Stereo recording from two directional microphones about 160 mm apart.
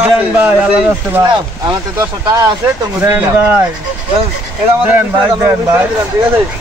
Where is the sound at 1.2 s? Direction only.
20° right (ahead or behind).